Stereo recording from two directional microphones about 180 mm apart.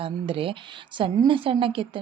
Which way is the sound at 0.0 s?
30° right (ahead or behind).